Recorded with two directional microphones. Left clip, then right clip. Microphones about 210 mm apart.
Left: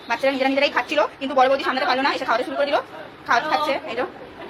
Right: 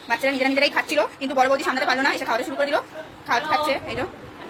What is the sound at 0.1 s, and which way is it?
A woman's voice, 20° right (ahead or behind).